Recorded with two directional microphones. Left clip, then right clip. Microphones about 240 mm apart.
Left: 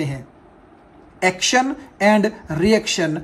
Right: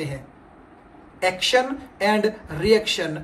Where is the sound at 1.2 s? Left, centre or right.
Left.